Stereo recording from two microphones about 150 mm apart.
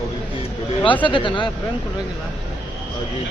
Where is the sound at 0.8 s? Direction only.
35° left (ahead or behind).